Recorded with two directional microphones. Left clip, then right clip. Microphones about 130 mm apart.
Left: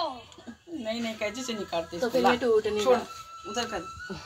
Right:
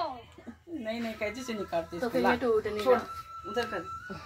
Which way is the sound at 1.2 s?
35° right (ahead or behind).